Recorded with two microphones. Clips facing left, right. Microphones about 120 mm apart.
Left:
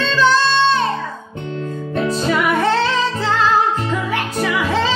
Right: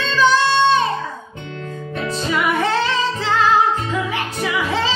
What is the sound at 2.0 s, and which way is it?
Music, 40° left (ahead or behind).